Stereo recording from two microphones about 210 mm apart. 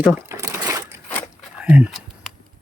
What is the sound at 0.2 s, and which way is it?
Crumpling, 15° right (ahead or behind).